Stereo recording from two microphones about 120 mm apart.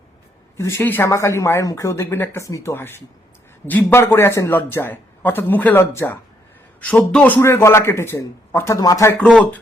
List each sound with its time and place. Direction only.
0.5 s a man's voice: 25° left (ahead or behind)
6.8 s a man's voice: 10° left (ahead or behind)
7.4 s a man's voice: 20° left (ahead or behind)
9.2 s a man's voice: 10° left (ahead or behind)